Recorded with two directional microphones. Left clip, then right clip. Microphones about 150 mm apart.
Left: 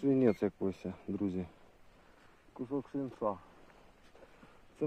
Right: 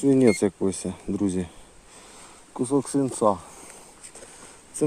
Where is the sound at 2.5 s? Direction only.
50° right (ahead or behind).